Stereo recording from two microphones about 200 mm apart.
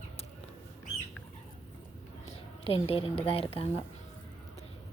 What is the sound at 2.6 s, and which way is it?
A woman's voice, 30° left (ahead or behind).